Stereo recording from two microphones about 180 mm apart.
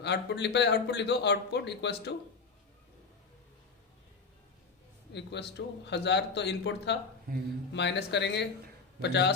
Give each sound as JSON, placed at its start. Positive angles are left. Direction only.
{"t": 0.0, "sound": "a man's voice", "side_deg": 70}
{"t": 5.1, "sound": "a man's voice", "side_deg": 70}
{"t": 7.3, "sound": "speech", "side_deg": -55}
{"t": 7.7, "sound": "a man's voice", "side_deg": 75}